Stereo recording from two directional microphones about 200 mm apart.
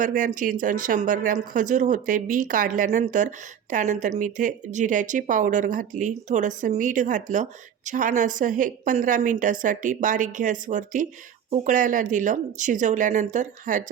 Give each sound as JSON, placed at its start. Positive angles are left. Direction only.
{"t": 0.0, "sound": "speech", "side_deg": -40}